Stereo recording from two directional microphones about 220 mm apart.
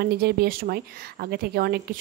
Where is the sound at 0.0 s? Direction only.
45° right (ahead or behind).